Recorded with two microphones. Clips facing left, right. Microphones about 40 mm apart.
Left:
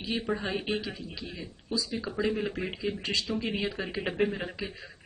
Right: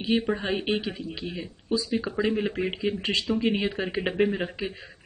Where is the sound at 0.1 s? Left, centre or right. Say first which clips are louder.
Right 5 dB; right.